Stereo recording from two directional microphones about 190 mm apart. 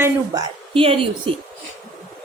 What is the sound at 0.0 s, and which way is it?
Speech, 20° right (ahead or behind).